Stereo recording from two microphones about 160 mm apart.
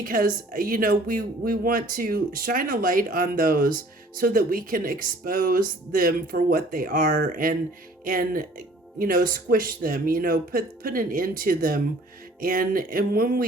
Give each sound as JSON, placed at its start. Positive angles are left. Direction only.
{"t": 0.0, "sound": "speech", "side_deg": -60}